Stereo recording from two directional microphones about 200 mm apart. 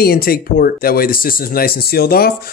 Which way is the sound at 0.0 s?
50° left (ahead or behind).